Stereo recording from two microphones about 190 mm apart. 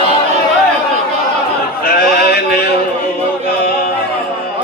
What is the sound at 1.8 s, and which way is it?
Sheep, 50° left (ahead or behind).